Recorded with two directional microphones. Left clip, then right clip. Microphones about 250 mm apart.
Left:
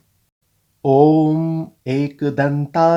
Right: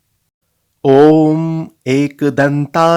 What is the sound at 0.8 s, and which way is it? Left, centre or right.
Speech, right.